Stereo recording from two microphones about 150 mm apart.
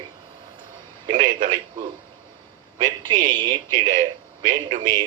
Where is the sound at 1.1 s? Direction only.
65° right (ahead or behind).